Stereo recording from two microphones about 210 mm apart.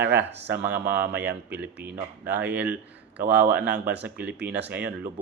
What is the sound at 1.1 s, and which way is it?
Speech, 55° right (ahead or behind).